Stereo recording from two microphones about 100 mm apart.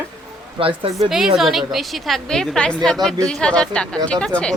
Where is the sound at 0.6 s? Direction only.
60° right (ahead or behind).